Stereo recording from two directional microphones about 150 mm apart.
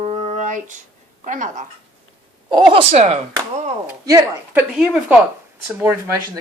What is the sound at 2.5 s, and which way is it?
Speech, 35° right (ahead or behind).